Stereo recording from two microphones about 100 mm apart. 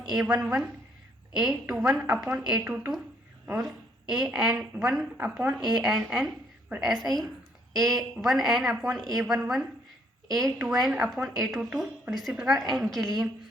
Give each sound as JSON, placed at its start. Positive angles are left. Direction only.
{"t": 0.2, "sound": "a woman's voice", "side_deg": -10}
{"t": 5.1, "sound": "a woman's voice", "side_deg": -15}
{"t": 5.5, "sound": "a woman's voice", "side_deg": -5}